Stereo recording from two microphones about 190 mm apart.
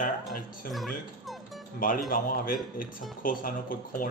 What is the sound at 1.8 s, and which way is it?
A man's voice, 45° left (ahead or behind).